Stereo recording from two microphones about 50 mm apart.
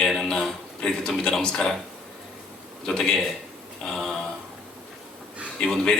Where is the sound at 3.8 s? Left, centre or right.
Centre.